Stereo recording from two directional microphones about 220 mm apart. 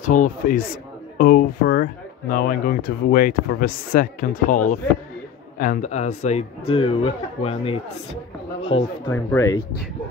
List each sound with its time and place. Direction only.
0.0 s speech: 35° left (ahead or behind)
9.1 s speech: 10° left (ahead or behind)